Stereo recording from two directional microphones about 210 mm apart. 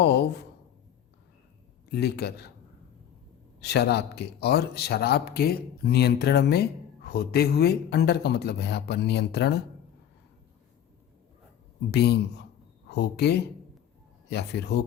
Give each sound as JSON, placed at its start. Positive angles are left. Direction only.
{"t": 0.0, "sound": "speech", "side_deg": 50}
{"t": 1.9, "sound": "speech", "side_deg": 50}
{"t": 3.6, "sound": "speech", "side_deg": 50}
{"t": 11.9, "sound": "speech", "side_deg": 50}